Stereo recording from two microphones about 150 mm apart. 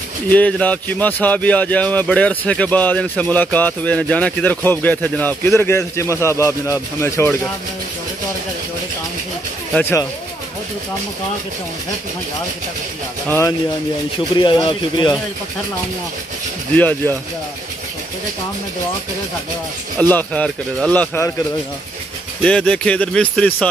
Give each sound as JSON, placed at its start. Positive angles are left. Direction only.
{"t": 0.3, "sound": "speech", "side_deg": 10}
{"t": 9.8, "sound": "speech", "side_deg": 15}
{"t": 14.4, "sound": "speech", "side_deg": 30}
{"t": 16.7, "sound": "speech", "side_deg": 10}
{"t": 20.0, "sound": "speech", "side_deg": 10}
{"t": 22.4, "sound": "speech", "side_deg": 5}